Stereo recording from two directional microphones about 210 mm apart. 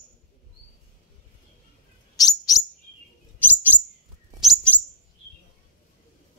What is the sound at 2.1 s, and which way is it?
Bird, 15° left (ahead or behind).